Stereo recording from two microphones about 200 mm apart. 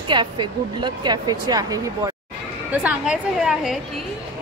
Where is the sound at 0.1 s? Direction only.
25° right (ahead or behind).